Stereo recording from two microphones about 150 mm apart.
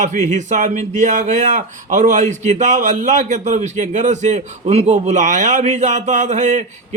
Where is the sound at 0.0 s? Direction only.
55° right (ahead or behind).